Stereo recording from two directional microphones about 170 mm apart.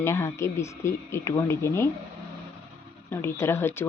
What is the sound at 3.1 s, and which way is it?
Speech, 15° left (ahead or behind).